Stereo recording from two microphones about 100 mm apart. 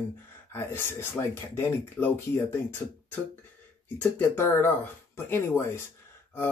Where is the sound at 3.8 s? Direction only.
20° left (ahead or behind).